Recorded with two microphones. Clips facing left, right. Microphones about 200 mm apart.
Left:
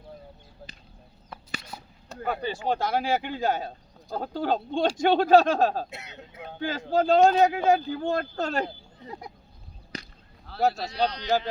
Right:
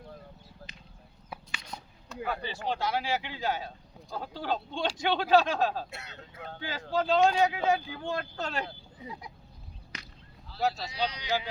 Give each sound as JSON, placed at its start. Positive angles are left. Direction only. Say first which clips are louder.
{"t": 0.6, "sound": "a sound", "louder": "left 4 dB", "side_deg": 20}
{"t": 1.7, "sound": "a sound", "louder": "left 1 dB", "side_deg": 5}
{"t": 2.2, "sound": "speech", "louder": "left 5 dB", "side_deg": 45}
{"t": 5.9, "sound": "speech", "louder": "left 3 dB", "side_deg": 20}
{"t": 6.6, "sound": "speech", "louder": "left 6 dB", "side_deg": 45}
{"t": 9.9, "sound": "whip", "louder": "left 9 dB", "side_deg": 35}
{"t": 10.4, "sound": "speech", "louder": "left 5 dB", "side_deg": 60}